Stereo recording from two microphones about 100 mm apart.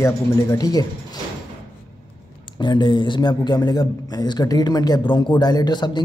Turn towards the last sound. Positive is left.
turn(degrees=45)  # may be behind; listen again after turning